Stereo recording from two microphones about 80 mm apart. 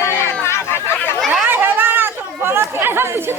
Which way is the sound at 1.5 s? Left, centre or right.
Right.